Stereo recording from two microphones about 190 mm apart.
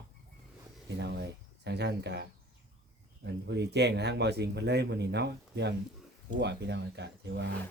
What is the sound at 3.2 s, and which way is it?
A man's voice, 65° right (ahead or behind).